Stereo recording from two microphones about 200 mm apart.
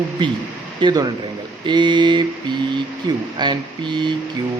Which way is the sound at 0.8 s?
20° right (ahead or behind).